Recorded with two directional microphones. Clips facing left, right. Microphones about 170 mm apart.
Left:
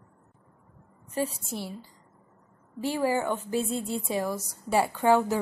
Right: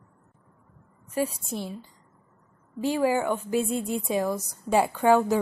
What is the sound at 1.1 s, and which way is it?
Speech, 15° right (ahead or behind).